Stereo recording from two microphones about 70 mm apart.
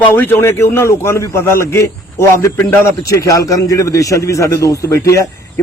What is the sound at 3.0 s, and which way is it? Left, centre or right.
A man's voice, left.